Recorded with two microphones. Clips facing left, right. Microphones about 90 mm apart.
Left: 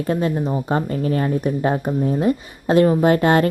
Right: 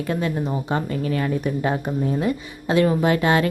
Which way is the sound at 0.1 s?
35° left (ahead or behind).